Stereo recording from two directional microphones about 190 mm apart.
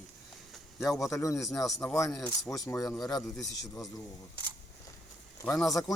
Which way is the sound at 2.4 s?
15° left (ahead or behind).